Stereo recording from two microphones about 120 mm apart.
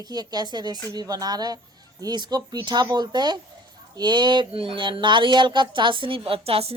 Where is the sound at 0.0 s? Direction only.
35° right (ahead or behind).